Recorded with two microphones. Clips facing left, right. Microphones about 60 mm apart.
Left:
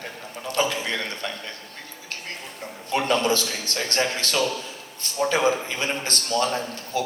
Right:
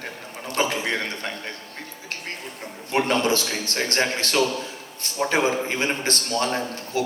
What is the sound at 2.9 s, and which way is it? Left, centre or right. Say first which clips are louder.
A man's voice: right 1 dB; right.